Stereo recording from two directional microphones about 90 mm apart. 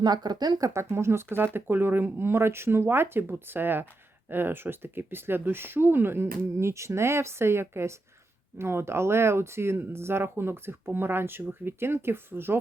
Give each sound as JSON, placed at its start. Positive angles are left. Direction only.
{"t": 0.0, "sound": "speech", "side_deg": -50}
{"t": 0.7, "sound": "speech", "side_deg": -30}